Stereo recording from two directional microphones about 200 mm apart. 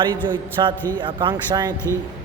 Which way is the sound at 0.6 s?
20° right (ahead or behind).